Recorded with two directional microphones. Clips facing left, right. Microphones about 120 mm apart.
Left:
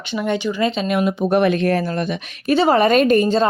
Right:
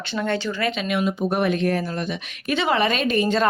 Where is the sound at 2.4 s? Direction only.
35° left (ahead or behind).